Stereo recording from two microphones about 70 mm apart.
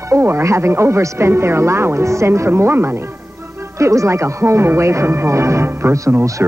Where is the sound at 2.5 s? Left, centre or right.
Right.